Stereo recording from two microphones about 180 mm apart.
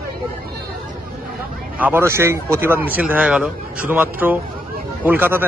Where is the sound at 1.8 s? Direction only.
15° right (ahead or behind).